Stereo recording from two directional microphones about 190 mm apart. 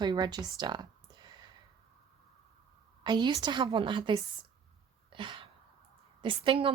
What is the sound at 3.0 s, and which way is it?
A woman's voice, 25° right (ahead or behind).